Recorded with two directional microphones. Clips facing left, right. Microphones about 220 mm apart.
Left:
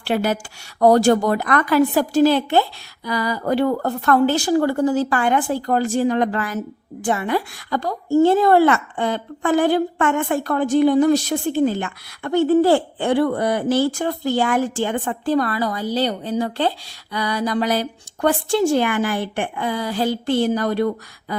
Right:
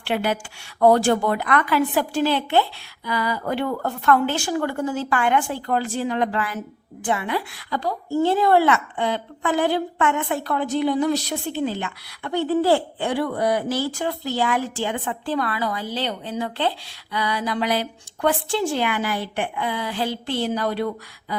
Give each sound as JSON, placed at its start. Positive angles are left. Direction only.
{"t": 0.0, "sound": "a woman's voice", "side_deg": 40}